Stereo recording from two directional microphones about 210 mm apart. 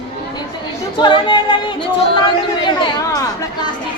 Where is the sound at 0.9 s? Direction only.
20° left (ahead or behind).